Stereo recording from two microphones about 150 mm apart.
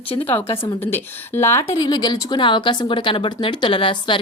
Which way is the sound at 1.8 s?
30° left (ahead or behind).